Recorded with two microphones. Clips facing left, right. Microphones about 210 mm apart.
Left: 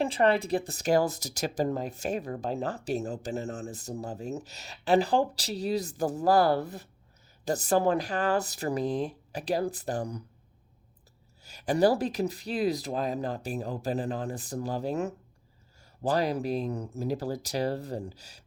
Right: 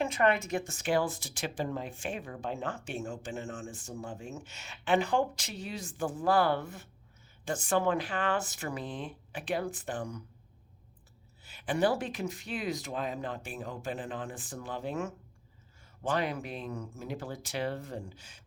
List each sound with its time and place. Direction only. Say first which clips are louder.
0.0 s speech: left 3 dB; 30° left (ahead or behind)
11.4 s speech: left 5 dB; 40° left (ahead or behind)